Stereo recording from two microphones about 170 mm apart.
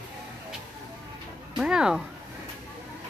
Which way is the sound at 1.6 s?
5° right (ahead or behind).